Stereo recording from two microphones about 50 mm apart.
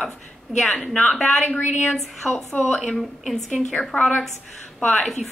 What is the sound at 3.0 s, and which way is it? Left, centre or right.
Speech, centre.